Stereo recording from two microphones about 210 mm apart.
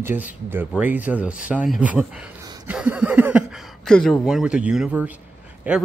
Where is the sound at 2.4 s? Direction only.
20° right (ahead or behind).